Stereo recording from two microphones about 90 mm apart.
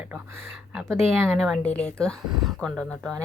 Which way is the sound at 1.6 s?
10° left (ahead or behind).